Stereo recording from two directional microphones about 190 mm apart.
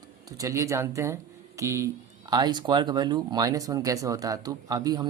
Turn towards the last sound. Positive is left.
turn(degrees=-20)  # may be behind; listen again after turning